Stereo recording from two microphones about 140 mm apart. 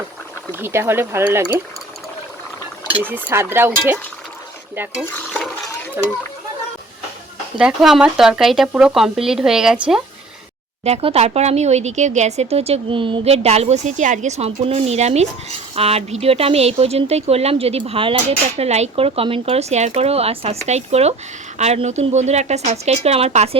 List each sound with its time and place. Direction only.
0.6 s speech: 15° right (ahead or behind)
3.0 s speech: 15° right (ahead or behind)
7.6 s speech: 5° right (ahead or behind)
10.8 s speech: 50° right (ahead or behind)